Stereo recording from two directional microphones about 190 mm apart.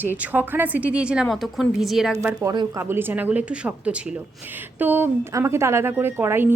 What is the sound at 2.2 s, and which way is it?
Speech, 15° right (ahead or behind).